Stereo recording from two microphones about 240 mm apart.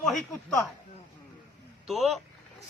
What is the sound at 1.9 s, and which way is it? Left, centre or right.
Speech, centre.